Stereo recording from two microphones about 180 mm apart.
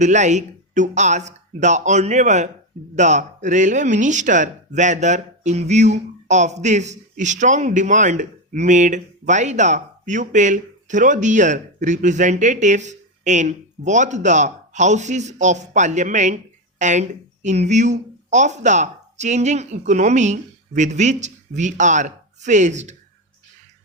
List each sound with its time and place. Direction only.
0.0 s speech: 40° right (ahead or behind)